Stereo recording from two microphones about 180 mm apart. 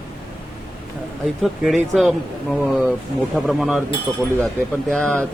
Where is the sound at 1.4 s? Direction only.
Centre (ahead or behind).